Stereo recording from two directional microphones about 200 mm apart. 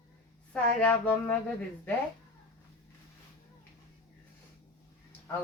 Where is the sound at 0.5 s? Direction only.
5° left (ahead or behind).